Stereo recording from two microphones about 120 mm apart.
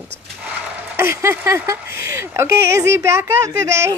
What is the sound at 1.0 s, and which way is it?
Speech, 25° right (ahead or behind).